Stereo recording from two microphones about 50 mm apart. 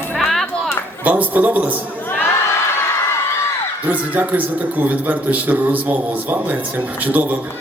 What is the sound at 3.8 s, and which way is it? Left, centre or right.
A man's voice, right.